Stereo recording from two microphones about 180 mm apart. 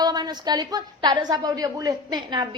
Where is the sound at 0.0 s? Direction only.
25° right (ahead or behind).